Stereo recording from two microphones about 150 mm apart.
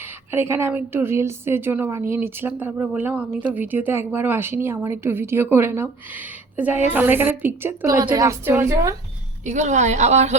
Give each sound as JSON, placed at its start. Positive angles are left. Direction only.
{"t": 0.3, "sound": "a woman's voice", "side_deg": -15}
{"t": 9.4, "sound": "a woman's voice", "side_deg": -50}